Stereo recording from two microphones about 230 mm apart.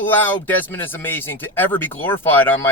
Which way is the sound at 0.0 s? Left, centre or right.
Centre.